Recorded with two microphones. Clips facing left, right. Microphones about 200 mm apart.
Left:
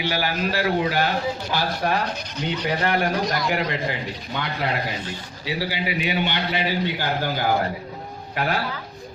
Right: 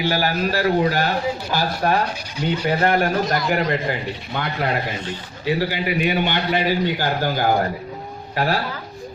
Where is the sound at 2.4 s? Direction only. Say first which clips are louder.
Right 5 dB; 10° right (ahead or behind).